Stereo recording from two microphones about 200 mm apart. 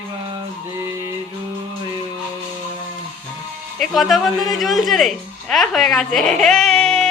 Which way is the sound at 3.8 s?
Centre (ahead or behind).